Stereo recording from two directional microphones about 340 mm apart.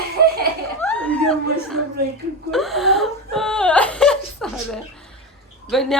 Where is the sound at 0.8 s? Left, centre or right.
Centre.